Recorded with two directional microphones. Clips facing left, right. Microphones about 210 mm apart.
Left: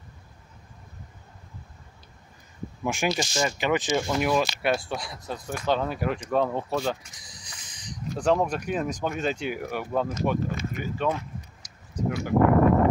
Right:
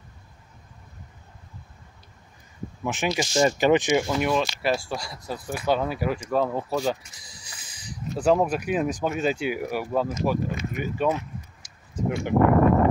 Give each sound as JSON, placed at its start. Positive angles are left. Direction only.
{"t": 2.8, "sound": "speech", "side_deg": 0}
{"t": 3.3, "sound": "speech", "side_deg": -35}
{"t": 3.7, "sound": "speech", "side_deg": -15}
{"t": 4.2, "sound": "speech", "side_deg": 5}
{"t": 11.6, "sound": "a sound", "side_deg": -25}